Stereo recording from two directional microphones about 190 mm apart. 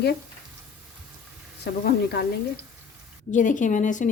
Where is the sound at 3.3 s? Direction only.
40° left (ahead or behind).